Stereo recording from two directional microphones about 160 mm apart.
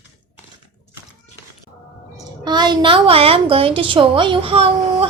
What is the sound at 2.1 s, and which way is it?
A woman's voice, 25° right (ahead or behind).